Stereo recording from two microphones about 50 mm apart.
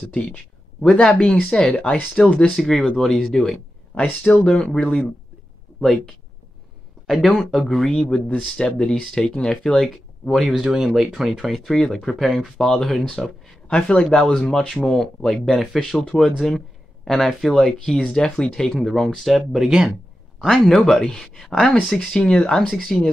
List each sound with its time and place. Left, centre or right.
0.7 s speech: centre
9.8 s speech: centre
10.5 s speech: centre
13.7 s speech: centre
20.3 s speech: centre